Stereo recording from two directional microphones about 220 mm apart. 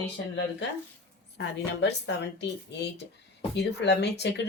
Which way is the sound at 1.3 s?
50° left (ahead or behind).